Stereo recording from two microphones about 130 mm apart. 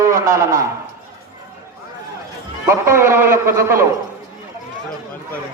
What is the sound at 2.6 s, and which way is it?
A man's voice, 20° right (ahead or behind).